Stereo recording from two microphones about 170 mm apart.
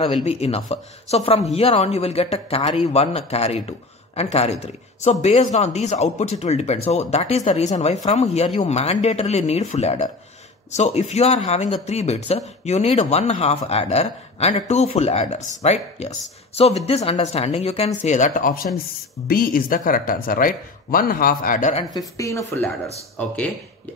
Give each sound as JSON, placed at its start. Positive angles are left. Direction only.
{"t": 0.0, "sound": "speech", "side_deg": 35}
{"t": 21.9, "sound": "speech", "side_deg": 20}
{"t": 23.1, "sound": "speech", "side_deg": 10}